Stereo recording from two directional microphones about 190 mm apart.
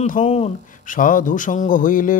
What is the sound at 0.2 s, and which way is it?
Speech, 30° left (ahead or behind).